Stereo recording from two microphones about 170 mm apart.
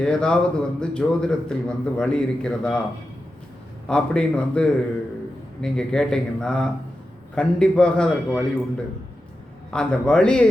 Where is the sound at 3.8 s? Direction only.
5° left (ahead or behind).